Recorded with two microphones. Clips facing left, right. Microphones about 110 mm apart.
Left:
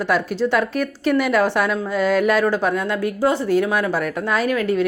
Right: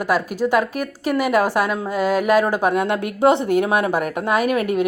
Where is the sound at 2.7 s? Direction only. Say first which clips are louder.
Right 2 dB; 60° right (ahead or behind).